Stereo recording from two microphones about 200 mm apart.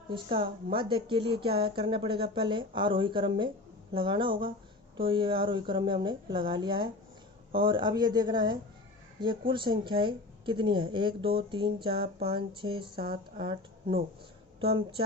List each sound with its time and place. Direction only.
0.1 s a woman's voice: 25° right (ahead or behind)